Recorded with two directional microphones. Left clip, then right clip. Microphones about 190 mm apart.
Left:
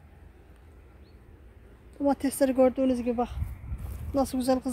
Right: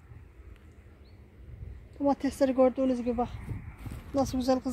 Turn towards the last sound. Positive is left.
turn(degrees=0)  # may be behind; listen again after turning